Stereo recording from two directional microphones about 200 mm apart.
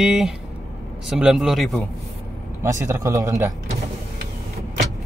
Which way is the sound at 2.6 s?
15° right (ahead or behind).